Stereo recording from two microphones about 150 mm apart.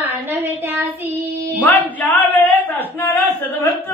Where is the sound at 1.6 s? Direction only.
10° left (ahead or behind).